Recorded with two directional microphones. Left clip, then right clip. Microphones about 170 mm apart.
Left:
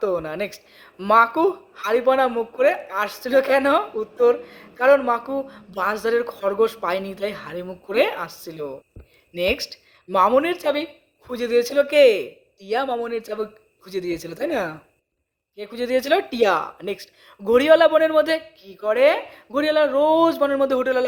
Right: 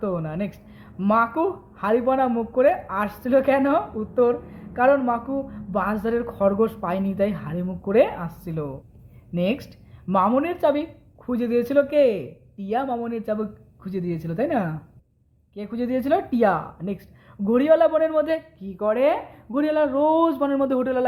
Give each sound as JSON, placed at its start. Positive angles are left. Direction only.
{"t": 0.0, "sound": "a woman's voice", "side_deg": 25}